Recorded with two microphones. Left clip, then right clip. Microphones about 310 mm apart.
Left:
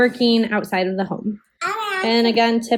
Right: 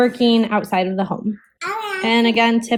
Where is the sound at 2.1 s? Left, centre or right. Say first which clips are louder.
Right 1 dB; right.